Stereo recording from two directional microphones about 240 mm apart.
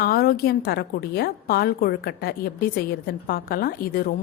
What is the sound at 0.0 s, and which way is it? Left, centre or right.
A woman's voice, left.